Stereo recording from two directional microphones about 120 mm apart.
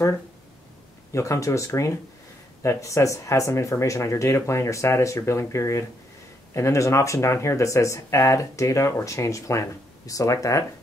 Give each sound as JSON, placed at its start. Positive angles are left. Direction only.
{"t": 1.1, "sound": "speech", "side_deg": 25}